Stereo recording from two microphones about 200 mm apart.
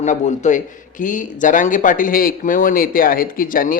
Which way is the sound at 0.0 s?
35° left (ahead or behind).